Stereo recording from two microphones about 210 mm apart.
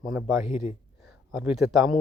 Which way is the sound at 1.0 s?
5° right (ahead or behind).